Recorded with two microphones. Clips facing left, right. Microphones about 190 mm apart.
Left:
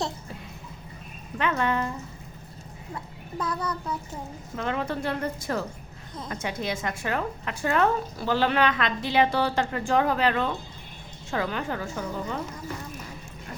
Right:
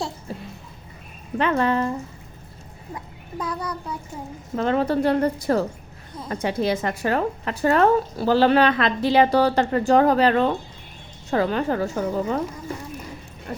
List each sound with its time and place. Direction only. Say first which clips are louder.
1.4 s a woman's voice: right 5 dB; 35° right (ahead or behind)
2.9 s a child's voice: right 2 dB; 10° right (ahead or behind)
4.5 s a woman's voice: right 8 dB; 35° right (ahead or behind)
13.5 s a sound: right 8 dB; 40° right (ahead or behind)